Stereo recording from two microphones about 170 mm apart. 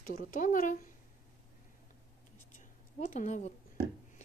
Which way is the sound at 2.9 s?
45° left (ahead or behind).